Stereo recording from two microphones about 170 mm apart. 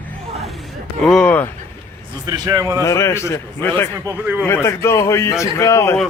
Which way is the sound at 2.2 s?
20° right (ahead or behind).